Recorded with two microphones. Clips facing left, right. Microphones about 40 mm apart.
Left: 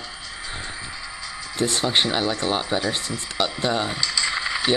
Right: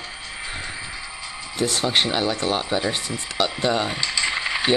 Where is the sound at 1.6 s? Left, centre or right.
Centre.